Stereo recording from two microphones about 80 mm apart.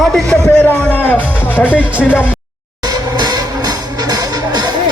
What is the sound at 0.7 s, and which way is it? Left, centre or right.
Speech, right.